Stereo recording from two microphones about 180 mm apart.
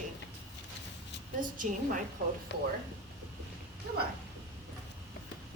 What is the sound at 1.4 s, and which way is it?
Speech, 45° right (ahead or behind).